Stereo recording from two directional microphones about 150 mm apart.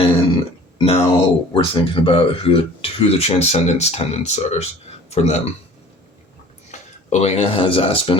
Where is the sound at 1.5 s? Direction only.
35° left (ahead or behind).